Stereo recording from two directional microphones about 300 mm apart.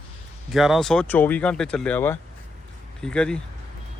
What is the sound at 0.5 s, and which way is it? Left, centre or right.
Speech, centre.